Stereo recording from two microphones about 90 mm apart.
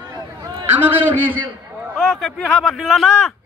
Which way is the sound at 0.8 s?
20° right (ahead or behind).